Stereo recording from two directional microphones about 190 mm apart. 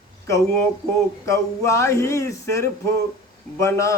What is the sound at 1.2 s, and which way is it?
A man's voice, 15° left (ahead or behind).